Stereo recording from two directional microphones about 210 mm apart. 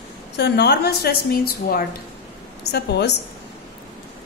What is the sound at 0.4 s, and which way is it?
A woman's voice, 50° left (ahead or behind).